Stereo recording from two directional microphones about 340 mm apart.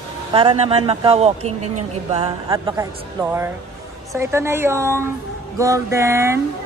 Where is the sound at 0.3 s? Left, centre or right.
Centre.